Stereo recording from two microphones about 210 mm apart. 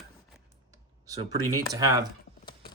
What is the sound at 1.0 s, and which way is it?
Speech, 15° right (ahead or behind).